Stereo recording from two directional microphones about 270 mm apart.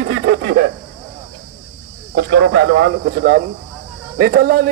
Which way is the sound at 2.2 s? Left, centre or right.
Right.